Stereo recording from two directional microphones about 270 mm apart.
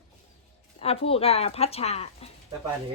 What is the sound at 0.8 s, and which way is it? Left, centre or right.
Speech, left.